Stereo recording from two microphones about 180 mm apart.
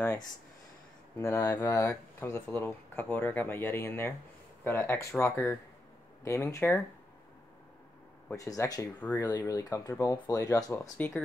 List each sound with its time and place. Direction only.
1.1 s speech: 15° left (ahead or behind)
8.3 s speech: 15° left (ahead or behind)